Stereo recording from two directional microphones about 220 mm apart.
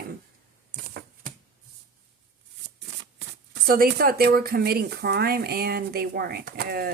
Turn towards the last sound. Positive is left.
turn(degrees=-45)  # may be behind; listen again after turning